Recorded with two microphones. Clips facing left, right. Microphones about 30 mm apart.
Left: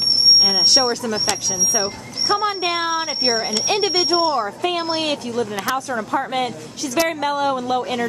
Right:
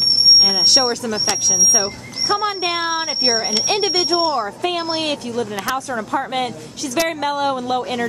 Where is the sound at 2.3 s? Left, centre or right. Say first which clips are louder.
Even; centre.